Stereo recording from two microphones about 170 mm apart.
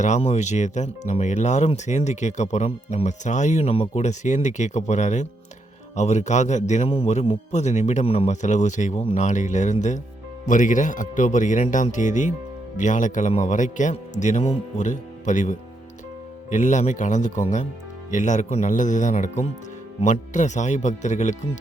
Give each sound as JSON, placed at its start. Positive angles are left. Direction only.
{"t": 0.0, "sound": "speech", "side_deg": 40}